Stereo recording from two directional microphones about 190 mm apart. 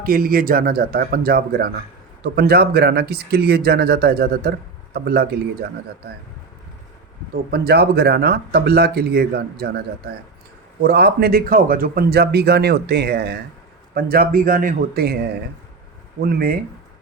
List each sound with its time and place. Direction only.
0.0 s speech: 50° right (ahead or behind)
7.5 s speech: 55° right (ahead or behind)